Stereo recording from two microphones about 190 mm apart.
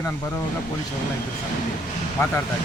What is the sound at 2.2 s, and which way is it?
Speech, 15° left (ahead or behind).